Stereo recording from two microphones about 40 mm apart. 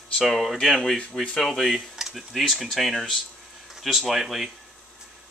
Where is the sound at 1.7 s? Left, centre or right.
Centre.